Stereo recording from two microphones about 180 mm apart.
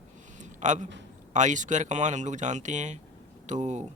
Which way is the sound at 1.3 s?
45° right (ahead or behind).